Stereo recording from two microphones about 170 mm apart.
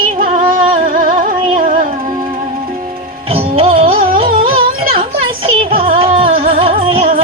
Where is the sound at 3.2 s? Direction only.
35° right (ahead or behind).